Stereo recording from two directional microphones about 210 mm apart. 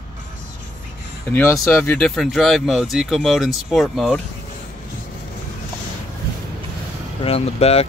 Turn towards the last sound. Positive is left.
turn(degrees=30)  # may be behind; listen again after turning